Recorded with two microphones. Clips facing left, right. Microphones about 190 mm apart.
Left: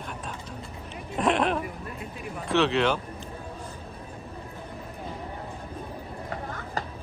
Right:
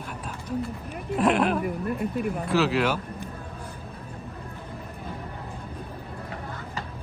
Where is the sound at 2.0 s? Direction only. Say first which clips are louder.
Right 8 dB; 55° right (ahead or behind).